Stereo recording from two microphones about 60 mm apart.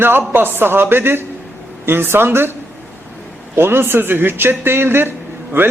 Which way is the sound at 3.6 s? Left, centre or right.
Right.